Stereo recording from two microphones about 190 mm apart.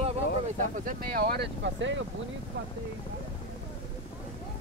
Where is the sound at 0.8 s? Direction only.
50° right (ahead or behind); by 2.0 s 75° right (ahead or behind).